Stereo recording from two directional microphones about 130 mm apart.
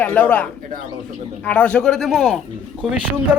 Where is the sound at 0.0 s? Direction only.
10° left (ahead or behind).